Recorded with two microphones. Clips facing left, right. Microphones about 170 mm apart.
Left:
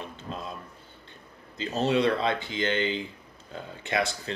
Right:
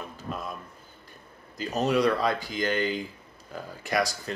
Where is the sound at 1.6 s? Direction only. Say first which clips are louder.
Even; 25° left (ahead or behind).